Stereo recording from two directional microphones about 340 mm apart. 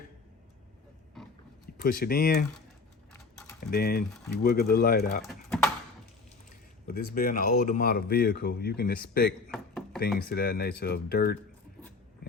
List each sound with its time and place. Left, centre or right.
1.8 s speech: left
3.1 s a sound: centre
3.7 s speech: left
5.2 s typing: centre
6.8 s speech: left
9.5 s chopping: centre
10.2 s speech: left